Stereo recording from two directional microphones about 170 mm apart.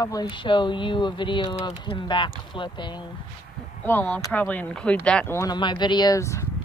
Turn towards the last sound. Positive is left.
turn(degrees=15)  # may be behind; listen again after turning